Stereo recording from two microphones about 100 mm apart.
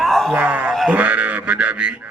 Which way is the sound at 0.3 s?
15° right (ahead or behind).